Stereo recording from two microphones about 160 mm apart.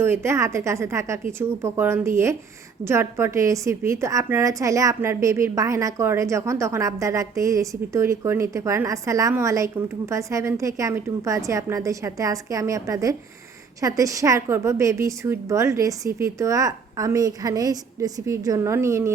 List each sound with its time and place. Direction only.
0.0 s a woman's voice: 15° right (ahead or behind)